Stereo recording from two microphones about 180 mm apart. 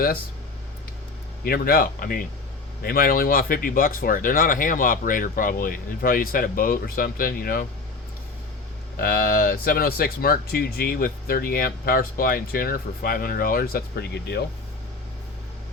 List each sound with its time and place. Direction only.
1.5 s speech: 55° left (ahead or behind)
9.0 s speech: 55° left (ahead or behind)